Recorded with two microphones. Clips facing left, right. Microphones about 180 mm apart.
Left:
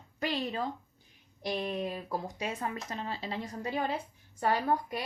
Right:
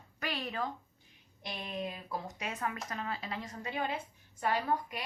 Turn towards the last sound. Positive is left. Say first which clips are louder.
# left 3 dB
turn(degrees=35)  # may be behind; listen again after turning